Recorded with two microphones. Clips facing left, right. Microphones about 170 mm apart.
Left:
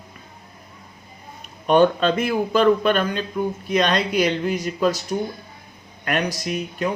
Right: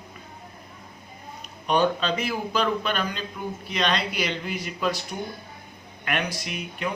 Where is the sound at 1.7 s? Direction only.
50° left (ahead or behind).